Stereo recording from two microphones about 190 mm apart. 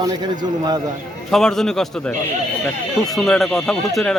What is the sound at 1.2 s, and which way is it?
Speech, centre (ahead or behind).